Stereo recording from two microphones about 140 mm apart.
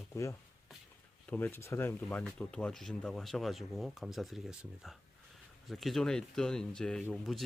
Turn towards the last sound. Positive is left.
turn(degrees=5)  # may be behind; listen again after turning